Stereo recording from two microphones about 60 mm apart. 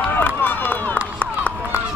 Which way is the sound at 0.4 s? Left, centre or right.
Left.